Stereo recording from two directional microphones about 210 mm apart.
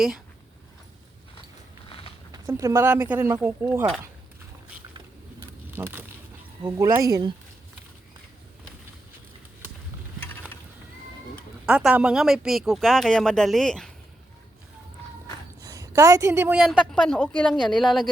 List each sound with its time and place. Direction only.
2.3 s speech: 15° right (ahead or behind)
5.7 s a sound: 10° right (ahead or behind)
6.6 s speech: 15° right (ahead or behind)
11.6 s a woman's voice: 5° right (ahead or behind)
15.6 s a woman's voice: 15° right (ahead or behind); by 18.1 s centre (ahead or behind)